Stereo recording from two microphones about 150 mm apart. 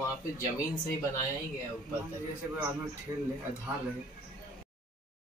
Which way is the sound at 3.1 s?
20° right (ahead or behind).